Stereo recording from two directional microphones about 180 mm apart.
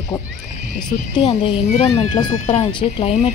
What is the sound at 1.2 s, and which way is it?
Speech, 30° left (ahead or behind).